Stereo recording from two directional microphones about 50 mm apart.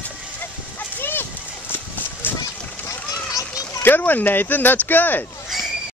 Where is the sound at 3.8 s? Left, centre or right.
Left.